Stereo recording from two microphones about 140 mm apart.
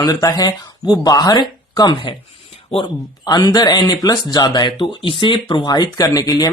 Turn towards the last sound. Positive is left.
turn(degrees=25)  # may be behind; listen again after turning